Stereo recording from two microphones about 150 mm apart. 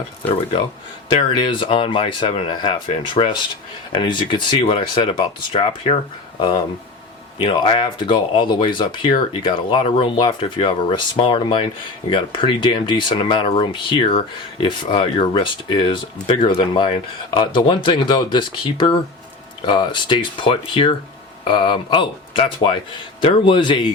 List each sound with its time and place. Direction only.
1.1 s speech: 35° left (ahead or behind)
7.3 s speech: 35° left (ahead or behind)